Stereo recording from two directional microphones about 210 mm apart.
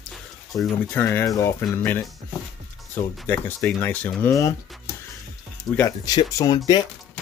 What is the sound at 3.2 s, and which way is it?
Speech, 10° left (ahead or behind).